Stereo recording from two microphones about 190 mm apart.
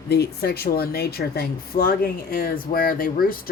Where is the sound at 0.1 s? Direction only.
55° left (ahead or behind).